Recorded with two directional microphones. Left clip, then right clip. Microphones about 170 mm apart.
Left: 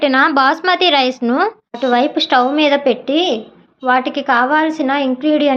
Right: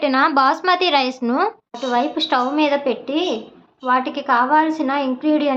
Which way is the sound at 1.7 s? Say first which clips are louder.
Left 5 dB; 30° left (ahead or behind).